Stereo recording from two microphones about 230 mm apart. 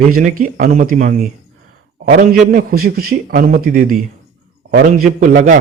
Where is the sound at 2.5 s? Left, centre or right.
Right.